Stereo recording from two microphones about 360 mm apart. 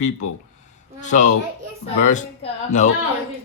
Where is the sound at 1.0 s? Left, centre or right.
Centre.